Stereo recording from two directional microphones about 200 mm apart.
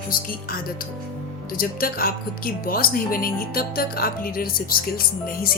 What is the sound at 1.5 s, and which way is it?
Speech, 45° left (ahead or behind).